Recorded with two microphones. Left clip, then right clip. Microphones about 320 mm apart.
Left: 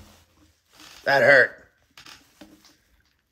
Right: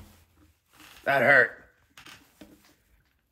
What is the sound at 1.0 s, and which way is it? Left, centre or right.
Speech, left.